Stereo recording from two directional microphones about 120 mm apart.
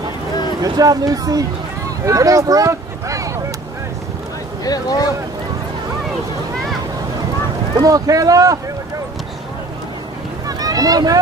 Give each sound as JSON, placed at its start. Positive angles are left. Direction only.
{"t": 0.6, "sound": "speech", "side_deg": -30}
{"t": 4.6, "sound": "speech", "side_deg": 30}
{"t": 7.8, "sound": "speech", "side_deg": -30}
{"t": 10.4, "sound": "boat", "side_deg": -30}